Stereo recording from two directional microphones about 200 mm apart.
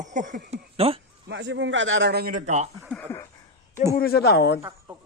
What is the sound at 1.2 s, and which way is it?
A man's voice, 60° right (ahead or behind).